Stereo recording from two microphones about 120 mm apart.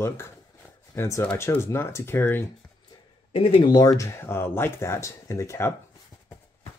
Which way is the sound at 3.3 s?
50° left (ahead or behind).